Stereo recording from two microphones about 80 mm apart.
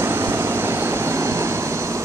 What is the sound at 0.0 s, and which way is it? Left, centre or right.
Vehicle, right.